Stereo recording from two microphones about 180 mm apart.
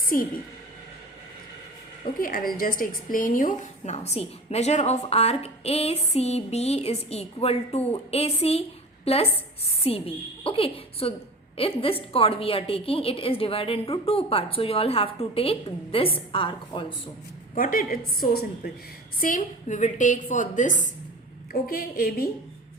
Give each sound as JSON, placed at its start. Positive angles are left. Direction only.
{"t": 0.1, "sound": "a woman's voice", "side_deg": 50}
{"t": 2.1, "sound": "a woman's voice", "side_deg": 55}
{"t": 17.5, "sound": "a woman's voice", "side_deg": 50}
{"t": 19.2, "sound": "a woman's voice", "side_deg": 45}